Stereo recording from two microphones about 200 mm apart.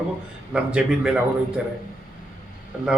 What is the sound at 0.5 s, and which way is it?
Speech, 5° right (ahead or behind).